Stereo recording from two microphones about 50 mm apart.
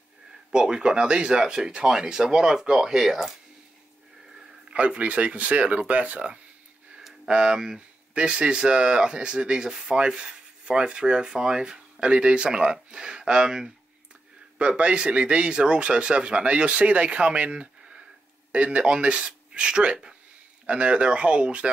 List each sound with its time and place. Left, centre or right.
0.5 s speech: centre
4.4 s speech: right